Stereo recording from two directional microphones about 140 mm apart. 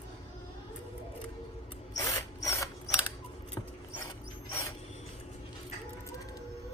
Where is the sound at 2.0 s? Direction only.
25° left (ahead or behind).